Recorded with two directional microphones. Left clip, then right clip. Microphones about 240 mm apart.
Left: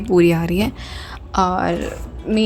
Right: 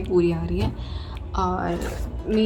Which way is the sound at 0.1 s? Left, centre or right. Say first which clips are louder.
Left 7 dB; left.